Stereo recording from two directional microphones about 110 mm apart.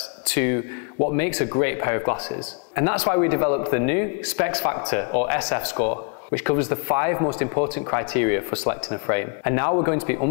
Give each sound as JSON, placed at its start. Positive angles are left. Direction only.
{"t": 0.3, "sound": "speech", "side_deg": 20}